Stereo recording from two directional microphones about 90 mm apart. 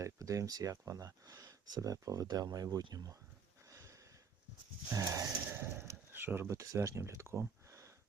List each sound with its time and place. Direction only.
0.0 s speech: 35° right (ahead or behind)
3.7 s a sound: 35° right (ahead or behind)
5.1 s speech: 30° right (ahead or behind)